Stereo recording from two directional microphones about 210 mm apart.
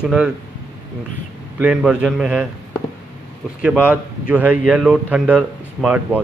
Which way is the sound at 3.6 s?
5° right (ahead or behind).